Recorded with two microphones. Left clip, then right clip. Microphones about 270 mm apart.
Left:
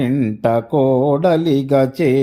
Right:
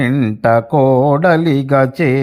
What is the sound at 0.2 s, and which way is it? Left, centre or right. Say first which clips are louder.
Speech: right 6 dB; right.